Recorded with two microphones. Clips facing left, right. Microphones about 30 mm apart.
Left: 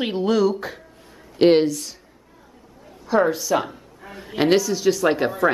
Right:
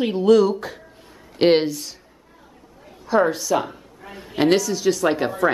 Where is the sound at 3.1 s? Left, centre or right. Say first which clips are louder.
Even; centre.